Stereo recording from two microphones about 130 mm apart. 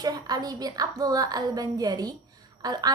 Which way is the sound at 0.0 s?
30° right (ahead or behind).